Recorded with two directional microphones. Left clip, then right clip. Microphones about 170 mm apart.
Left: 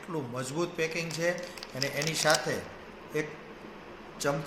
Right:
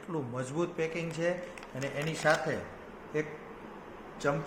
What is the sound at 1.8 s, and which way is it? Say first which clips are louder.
Speech: left 3 dB; 10° right (ahead or behind).